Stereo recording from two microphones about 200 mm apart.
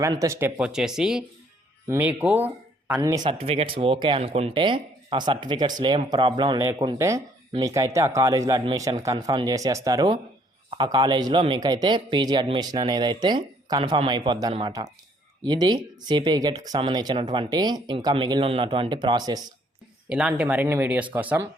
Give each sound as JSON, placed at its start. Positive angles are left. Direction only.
{"t": 0.0, "sound": "speech", "side_deg": -15}
{"t": 3.2, "sound": "speech", "side_deg": -30}
{"t": 20.1, "sound": "speech", "side_deg": -5}